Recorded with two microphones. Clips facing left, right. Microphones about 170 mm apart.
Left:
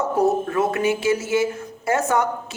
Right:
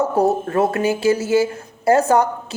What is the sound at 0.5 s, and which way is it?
Speech, 35° right (ahead or behind).